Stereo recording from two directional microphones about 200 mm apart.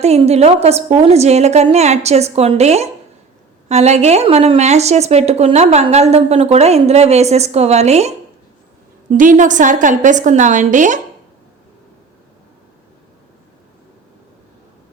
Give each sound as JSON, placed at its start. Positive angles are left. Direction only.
{"t": 0.0, "sound": "speech", "side_deg": -30}